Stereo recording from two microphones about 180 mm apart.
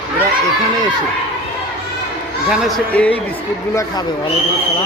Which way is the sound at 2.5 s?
5° left (ahead or behind).